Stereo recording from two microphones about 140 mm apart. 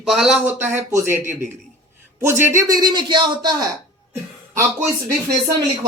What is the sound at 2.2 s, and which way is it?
Speech, 15° right (ahead or behind).